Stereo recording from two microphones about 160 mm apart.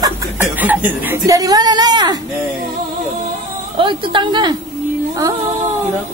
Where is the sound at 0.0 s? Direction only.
10° right (ahead or behind).